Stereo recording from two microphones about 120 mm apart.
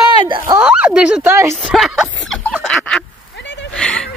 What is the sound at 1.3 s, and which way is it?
Speech, 20° right (ahead or behind).